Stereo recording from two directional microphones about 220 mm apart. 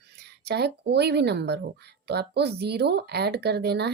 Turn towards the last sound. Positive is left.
turn(degrees=-50)  # may be behind; listen again after turning